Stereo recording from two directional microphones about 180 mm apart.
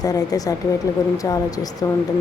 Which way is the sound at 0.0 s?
20° left (ahead or behind).